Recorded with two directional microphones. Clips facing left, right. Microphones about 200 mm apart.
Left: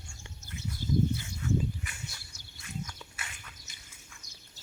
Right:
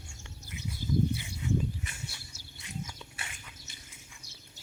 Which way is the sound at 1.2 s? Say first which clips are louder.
Left 1 dB; 15° right (ahead or behind).